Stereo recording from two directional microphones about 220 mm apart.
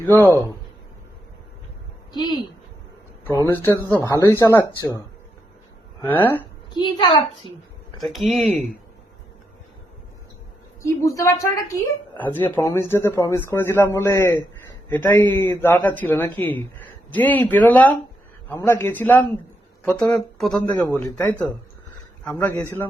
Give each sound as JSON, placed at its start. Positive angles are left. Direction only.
{"t": 0.2, "sound": "a man's voice", "side_deg": 10}
{"t": 2.1, "sound": "a woman's voice", "side_deg": 20}
{"t": 6.0, "sound": "a man's voice", "side_deg": 10}
{"t": 6.7, "sound": "a woman's voice", "side_deg": 20}
{"t": 7.9, "sound": "speech", "side_deg": 0}
{"t": 10.8, "sound": "a man's voice", "side_deg": 15}